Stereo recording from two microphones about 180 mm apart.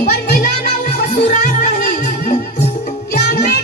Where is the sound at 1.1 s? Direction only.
45° left (ahead or behind).